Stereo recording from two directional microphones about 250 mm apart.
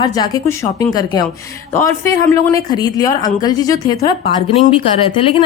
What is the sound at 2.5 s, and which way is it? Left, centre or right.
Speech, centre.